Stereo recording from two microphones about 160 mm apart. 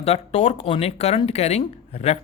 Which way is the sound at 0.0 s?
40° left (ahead or behind).